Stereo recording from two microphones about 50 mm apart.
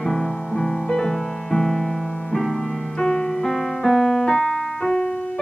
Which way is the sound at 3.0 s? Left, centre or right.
Centre.